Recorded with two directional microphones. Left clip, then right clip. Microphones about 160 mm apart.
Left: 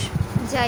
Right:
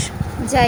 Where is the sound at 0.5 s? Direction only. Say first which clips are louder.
Right 7 dB; 20° right (ahead or behind).